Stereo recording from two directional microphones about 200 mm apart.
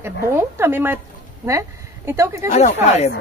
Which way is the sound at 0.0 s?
10° right (ahead or behind).